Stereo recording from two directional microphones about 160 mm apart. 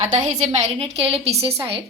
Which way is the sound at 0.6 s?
35° right (ahead or behind).